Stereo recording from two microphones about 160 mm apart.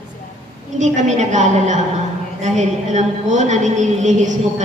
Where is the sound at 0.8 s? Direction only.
50° right (ahead or behind).